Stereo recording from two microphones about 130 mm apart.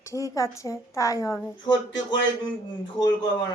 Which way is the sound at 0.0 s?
25° left (ahead or behind).